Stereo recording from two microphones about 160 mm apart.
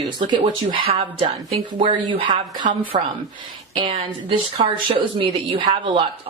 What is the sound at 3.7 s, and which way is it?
A woman's voice, 35° right (ahead or behind).